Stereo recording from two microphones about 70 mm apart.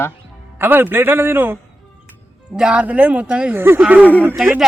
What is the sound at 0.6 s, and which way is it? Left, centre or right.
Speech, right.